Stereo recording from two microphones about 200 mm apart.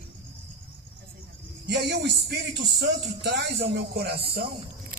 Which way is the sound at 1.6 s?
55° right (ahead or behind).